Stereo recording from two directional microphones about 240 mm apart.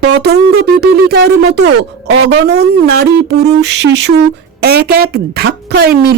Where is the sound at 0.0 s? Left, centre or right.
Right.